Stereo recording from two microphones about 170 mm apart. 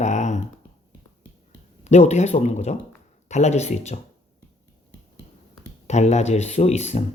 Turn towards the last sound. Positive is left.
turn(degrees=40)  # may be behind; listen again after turning